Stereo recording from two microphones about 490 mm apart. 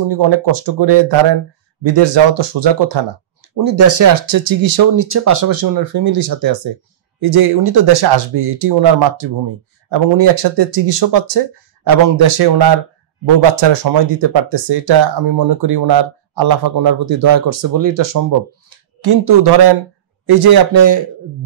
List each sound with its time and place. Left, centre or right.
0.1 s speech: right
3.5 s speech: right